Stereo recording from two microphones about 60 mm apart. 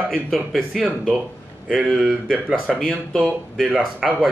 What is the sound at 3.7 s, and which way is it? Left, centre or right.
Speech, centre.